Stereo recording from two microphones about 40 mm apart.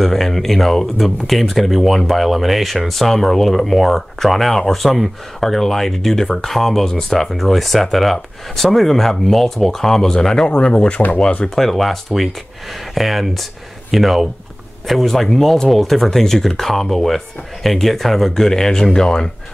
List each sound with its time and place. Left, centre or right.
0.0 s speech: centre; by 11.0 s left
11.5 s speech: centre